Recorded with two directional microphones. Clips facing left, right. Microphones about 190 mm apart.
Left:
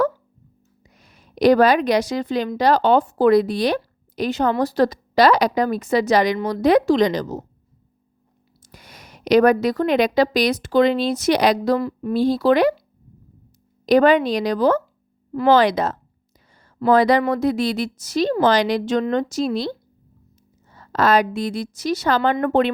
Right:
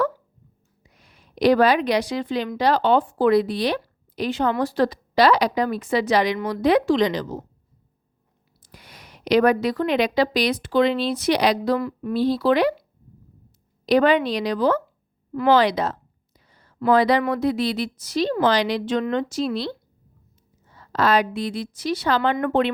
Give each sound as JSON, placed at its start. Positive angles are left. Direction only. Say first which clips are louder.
{"t": 0.9, "sound": "a woman's voice", "louder": "left 3 dB", "side_deg": 45}
{"t": 8.7, "sound": "a woman's voice", "louder": "left 2 dB", "side_deg": 45}
{"t": 12.1, "sound": "a woman's voice", "louder": "left 3 dB", "side_deg": 45}
{"t": 13.8, "sound": "a woman's voice", "louder": "left 3 dB", "side_deg": 45}
{"t": 20.7, "sound": "a woman's voice", "louder": "left 2 dB", "side_deg": 45}